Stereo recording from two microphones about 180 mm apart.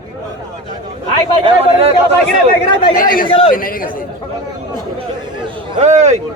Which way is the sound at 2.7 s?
25° left (ahead or behind).